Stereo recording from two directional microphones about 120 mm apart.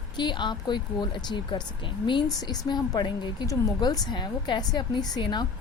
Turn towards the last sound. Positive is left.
turn(degrees=35)  # may be behind; listen again after turning